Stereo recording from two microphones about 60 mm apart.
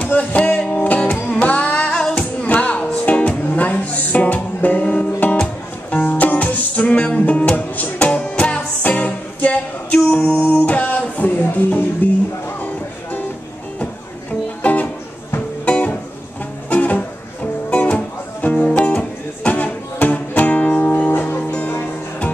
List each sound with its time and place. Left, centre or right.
0.0 s music: left
1.4 s female singing: left
2.4 s music: left
10.0 s music: left
10.3 s music: left
14.6 s music: left
19.4 s music: left